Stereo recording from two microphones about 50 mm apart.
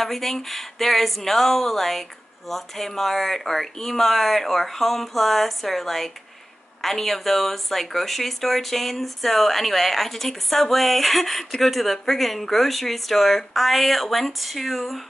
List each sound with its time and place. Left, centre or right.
0.0 s speech: centre